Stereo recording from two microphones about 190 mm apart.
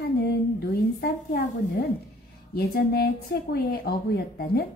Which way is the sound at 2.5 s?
55° left (ahead or behind).